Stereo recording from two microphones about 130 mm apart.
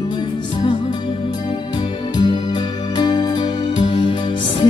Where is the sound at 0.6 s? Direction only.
40° left (ahead or behind).